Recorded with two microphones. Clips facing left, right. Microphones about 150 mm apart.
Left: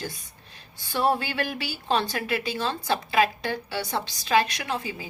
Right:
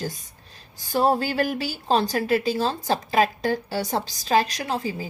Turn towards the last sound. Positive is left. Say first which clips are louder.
# right 4 dB
turn(degrees=-35)  # may be behind; listen again after turning